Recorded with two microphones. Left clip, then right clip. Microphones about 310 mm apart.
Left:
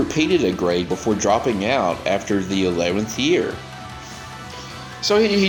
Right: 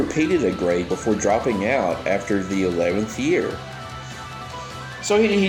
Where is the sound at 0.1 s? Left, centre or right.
Left.